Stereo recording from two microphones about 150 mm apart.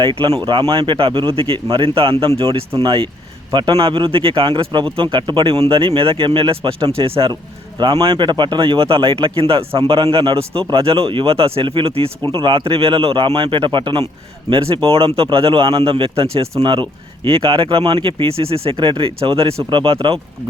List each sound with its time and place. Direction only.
0.0 s speech: 35° right (ahead or behind)